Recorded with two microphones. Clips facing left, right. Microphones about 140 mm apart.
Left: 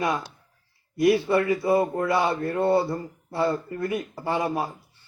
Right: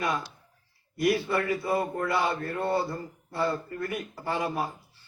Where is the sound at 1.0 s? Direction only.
25° left (ahead or behind).